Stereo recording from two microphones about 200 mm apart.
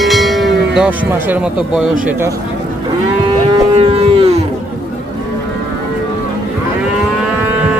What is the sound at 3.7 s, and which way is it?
Moo, 30° right (ahead or behind).